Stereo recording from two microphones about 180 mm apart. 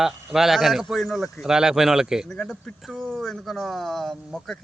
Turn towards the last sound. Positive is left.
turn(degrees=0)  # may be behind; listen again after turning